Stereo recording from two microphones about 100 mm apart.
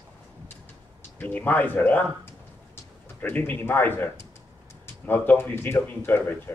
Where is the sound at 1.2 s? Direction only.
20° left (ahead or behind).